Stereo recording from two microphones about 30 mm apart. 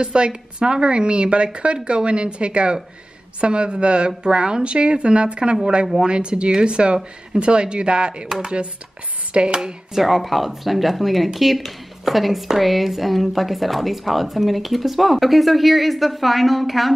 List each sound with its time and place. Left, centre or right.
0.0 s a woman's voice: right
9.3 s chopping: right
9.9 s a woman's voice: centre